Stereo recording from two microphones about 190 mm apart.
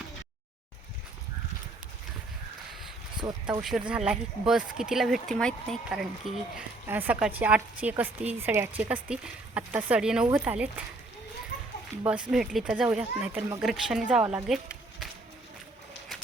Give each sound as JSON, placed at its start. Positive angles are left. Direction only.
{"t": 3.2, "sound": "speech", "side_deg": -20}
{"t": 3.6, "sound": "a woman's voice", "side_deg": -5}
{"t": 12.3, "sound": "speech", "side_deg": -5}